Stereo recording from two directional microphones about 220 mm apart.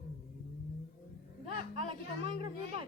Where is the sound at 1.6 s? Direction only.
25° right (ahead or behind).